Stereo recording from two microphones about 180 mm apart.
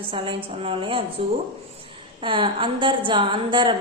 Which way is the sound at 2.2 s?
30° right (ahead or behind).